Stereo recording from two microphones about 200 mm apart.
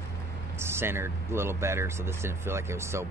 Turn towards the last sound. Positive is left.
turn(degrees=-15)  # may be behind; listen again after turning